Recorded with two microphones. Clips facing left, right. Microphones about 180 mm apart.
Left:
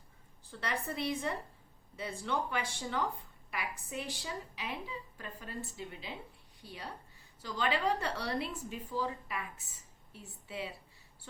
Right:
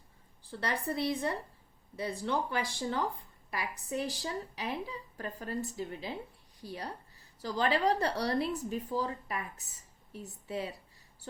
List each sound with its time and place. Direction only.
0.6 s a woman's voice: 35° right (ahead or behind)